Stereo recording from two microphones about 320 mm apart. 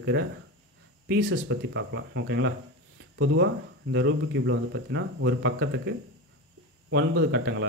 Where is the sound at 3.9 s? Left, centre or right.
Right.